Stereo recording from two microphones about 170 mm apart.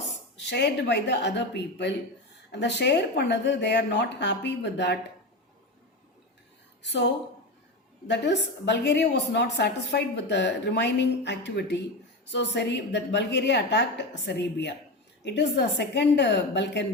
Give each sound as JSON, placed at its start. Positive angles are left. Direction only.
{"t": 0.0, "sound": "a woman's voice", "side_deg": 90}
{"t": 6.8, "sound": "a woman's voice", "side_deg": 85}